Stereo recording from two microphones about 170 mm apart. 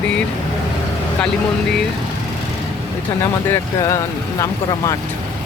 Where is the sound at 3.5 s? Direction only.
20° left (ahead or behind).